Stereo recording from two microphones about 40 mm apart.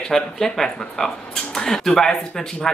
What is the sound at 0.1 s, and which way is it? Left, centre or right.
Speech, centre.